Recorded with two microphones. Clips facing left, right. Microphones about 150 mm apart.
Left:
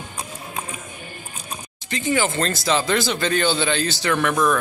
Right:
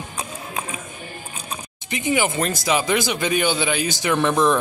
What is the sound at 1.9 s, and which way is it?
Speech, 20° right (ahead or behind).